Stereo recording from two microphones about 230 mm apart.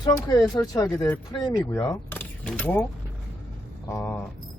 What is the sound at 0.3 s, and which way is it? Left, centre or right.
Speech, centre.